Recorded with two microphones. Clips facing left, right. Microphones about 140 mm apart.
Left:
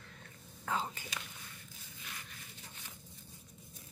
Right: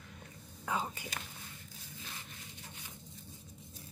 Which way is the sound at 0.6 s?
15° right (ahead or behind).